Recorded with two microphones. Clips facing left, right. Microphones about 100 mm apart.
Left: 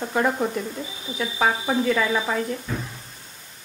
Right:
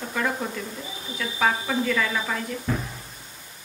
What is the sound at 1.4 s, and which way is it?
Speech, 25° left (ahead or behind).